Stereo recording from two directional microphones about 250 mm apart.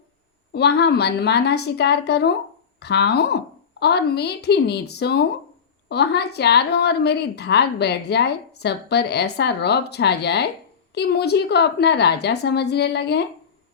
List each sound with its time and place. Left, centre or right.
0.5 s a woman's voice: left